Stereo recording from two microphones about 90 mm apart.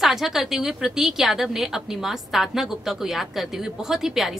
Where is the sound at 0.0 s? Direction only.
5° right (ahead or behind).